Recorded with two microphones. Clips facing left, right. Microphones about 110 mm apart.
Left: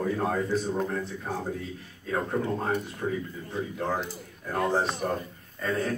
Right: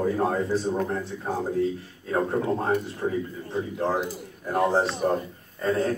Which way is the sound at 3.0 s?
30° right (ahead or behind).